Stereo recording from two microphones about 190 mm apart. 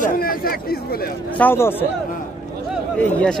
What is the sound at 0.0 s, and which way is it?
Speech, 50° left (ahead or behind).